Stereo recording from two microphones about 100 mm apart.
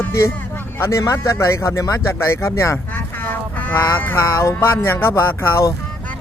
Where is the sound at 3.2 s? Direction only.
15° left (ahead or behind).